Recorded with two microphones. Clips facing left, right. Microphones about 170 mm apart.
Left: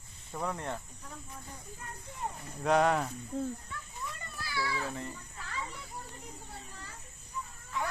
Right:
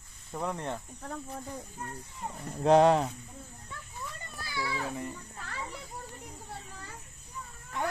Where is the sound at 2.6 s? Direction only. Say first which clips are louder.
Right 5 dB; 25° right (ahead or behind).